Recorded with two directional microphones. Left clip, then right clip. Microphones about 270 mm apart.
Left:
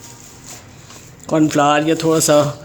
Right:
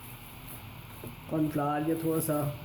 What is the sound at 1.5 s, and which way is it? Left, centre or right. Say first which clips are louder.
Speech: left 17 dB; left.